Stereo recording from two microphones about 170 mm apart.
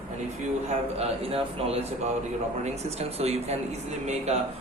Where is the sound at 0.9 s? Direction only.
35° right (ahead or behind).